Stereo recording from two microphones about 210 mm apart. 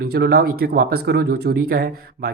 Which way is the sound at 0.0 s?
50° right (ahead or behind).